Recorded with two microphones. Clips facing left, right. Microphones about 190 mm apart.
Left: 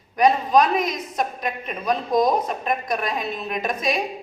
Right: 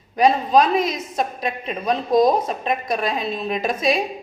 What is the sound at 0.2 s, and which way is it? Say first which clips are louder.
A woman's voice: right 1 dB; 30° right (ahead or behind).